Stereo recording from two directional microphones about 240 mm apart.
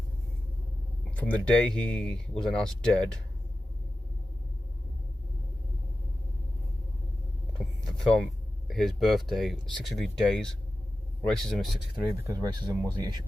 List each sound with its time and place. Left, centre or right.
1.1 s a sound: centre
1.5 s speech: centre
8.0 s speech: centre
12.2 s speech: centre